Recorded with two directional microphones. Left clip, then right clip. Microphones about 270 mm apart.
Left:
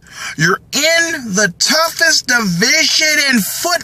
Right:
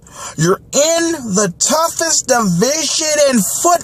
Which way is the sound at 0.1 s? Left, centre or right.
Centre.